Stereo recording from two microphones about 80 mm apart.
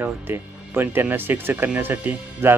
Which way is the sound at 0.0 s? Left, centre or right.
Right.